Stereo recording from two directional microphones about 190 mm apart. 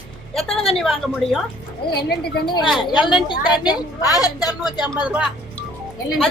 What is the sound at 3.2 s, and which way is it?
A woman's voice, 25° left (ahead or behind).